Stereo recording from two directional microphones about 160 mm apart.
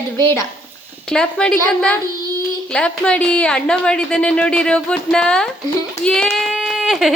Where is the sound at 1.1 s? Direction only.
5° left (ahead or behind).